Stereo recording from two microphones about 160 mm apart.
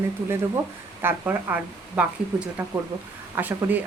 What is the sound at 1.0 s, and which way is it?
A woman's voice, 15° right (ahead or behind).